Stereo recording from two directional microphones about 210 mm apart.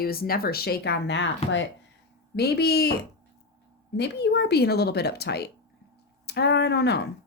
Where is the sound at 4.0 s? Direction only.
55° left (ahead or behind).